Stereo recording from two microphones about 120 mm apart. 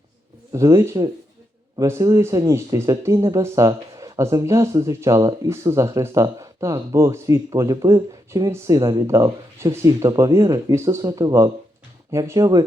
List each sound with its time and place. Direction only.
0.5 s speech: 25° right (ahead or behind)